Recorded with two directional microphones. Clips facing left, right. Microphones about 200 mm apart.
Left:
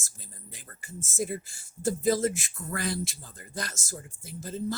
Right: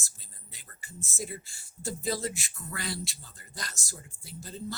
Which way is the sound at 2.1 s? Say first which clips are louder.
Left 7 dB; 50° left (ahead or behind).